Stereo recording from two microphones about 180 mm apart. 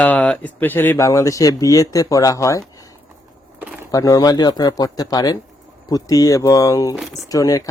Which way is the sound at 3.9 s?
20° left (ahead or behind).